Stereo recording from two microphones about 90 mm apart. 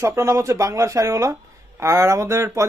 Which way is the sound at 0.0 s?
35° right (ahead or behind).